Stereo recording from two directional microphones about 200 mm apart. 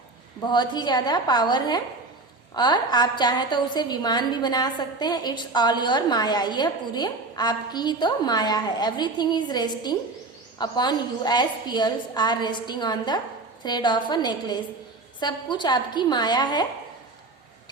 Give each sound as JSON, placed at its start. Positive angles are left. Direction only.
{"t": 0.5, "sound": "a woman's voice", "side_deg": 20}